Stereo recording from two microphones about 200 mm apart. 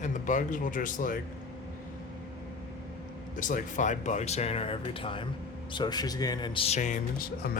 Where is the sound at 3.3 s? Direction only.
40° left (ahead or behind).